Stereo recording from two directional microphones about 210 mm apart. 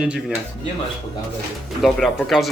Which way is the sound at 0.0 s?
5° right (ahead or behind).